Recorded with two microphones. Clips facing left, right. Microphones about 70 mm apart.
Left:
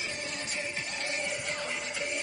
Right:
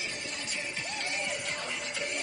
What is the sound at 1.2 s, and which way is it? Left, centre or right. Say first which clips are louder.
Music: left 1 dB; centre.